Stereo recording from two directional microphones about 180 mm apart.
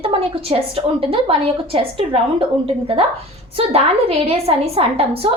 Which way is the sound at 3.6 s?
30° right (ahead or behind).